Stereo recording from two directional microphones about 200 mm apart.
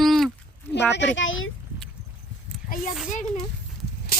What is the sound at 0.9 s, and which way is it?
Speech, 65° left (ahead or behind).